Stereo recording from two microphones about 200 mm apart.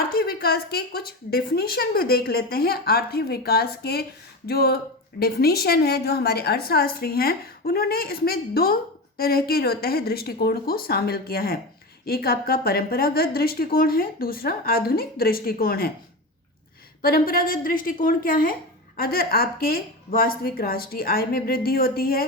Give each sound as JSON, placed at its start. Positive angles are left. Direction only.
{"t": 0.1, "sound": "a woman's voice", "side_deg": 50}
{"t": 17.0, "sound": "a woman's voice", "side_deg": 45}